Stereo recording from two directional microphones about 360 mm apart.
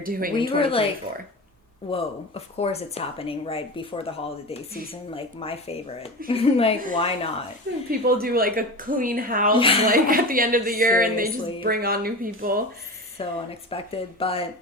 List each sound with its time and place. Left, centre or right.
0.0 s speech: right
0.6 s speech: centre
1.9 s speech: centre
7.9 s speech: right
9.6 s speech: centre
9.8 s speech: right
13.1 s speech: centre